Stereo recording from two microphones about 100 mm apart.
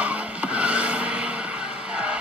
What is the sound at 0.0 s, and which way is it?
Vehicle, 10° right (ahead or behind).